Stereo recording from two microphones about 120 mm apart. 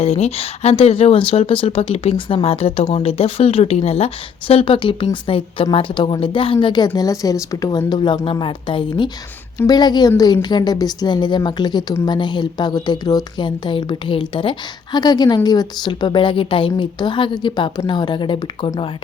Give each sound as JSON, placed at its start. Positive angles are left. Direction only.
{"t": 0.0, "sound": "a woman's voice", "side_deg": 60}
{"t": 9.6, "sound": "a woman's voice", "side_deg": 35}
{"t": 14.9, "sound": "a woman's voice", "side_deg": 35}